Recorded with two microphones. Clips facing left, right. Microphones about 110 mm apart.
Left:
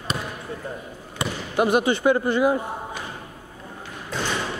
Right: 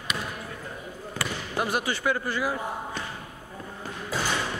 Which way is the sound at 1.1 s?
20° left (ahead or behind).